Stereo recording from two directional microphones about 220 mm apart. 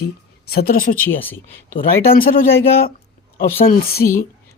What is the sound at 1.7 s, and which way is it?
Speech, 40° left (ahead or behind).